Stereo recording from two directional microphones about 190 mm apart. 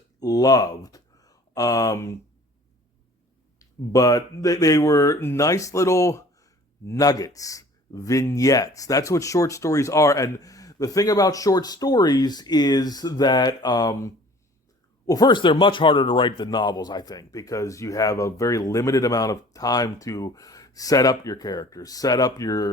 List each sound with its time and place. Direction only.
0.2 s speech: 20° left (ahead or behind)
3.6 s speech: 20° left (ahead or behind)